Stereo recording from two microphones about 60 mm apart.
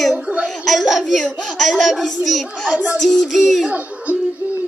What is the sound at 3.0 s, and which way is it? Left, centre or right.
Music, centre.